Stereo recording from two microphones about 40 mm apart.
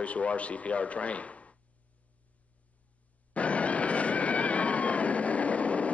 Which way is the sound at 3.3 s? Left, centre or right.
Left.